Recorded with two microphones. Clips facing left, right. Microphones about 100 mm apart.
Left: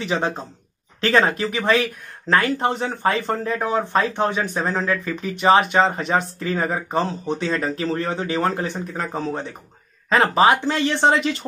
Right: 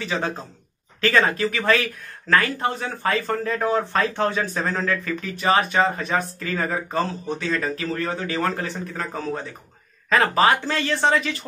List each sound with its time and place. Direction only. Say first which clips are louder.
0.0 s speech: left 3 dB; 25° left (ahead or behind)